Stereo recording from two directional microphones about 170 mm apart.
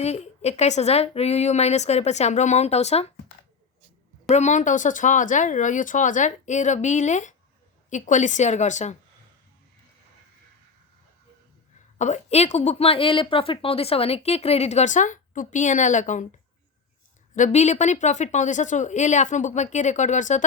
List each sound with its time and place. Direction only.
0.0 s a woman's voice: 40° left (ahead or behind)
4.3 s speech: 45° left (ahead or behind)
11.9 s a woman's voice: 45° left (ahead or behind)
17.3 s speech: 45° left (ahead or behind)